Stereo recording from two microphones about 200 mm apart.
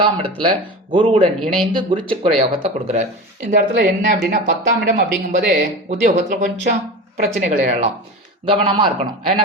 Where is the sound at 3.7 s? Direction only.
50° right (ahead or behind).